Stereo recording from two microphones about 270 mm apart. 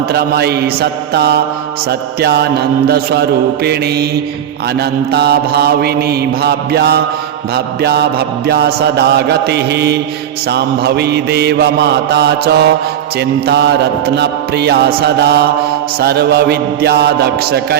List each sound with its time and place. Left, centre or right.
0.1 s mantra: right